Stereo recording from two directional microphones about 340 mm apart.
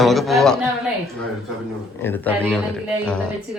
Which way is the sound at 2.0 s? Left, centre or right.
Centre.